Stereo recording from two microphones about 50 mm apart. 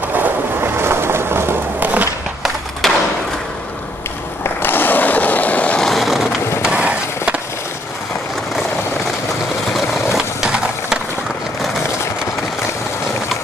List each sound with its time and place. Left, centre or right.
0.1 s vehicle: right
1.8 s a sound: right
2.8 s thump: centre
4.6 s skateboard: left
5.8 s skateboard: centre
6.6 s skateboard: right
9.8 s a sound: centre